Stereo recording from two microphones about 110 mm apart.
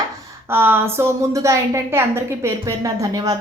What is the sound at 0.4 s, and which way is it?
A woman's voice, 20° right (ahead or behind).